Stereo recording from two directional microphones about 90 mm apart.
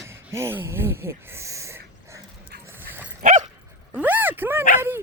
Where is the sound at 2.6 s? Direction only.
25° right (ahead or behind).